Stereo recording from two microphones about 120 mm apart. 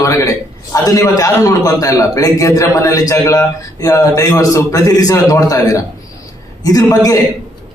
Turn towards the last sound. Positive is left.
turn(degrees=30)  # may be behind; listen again after turning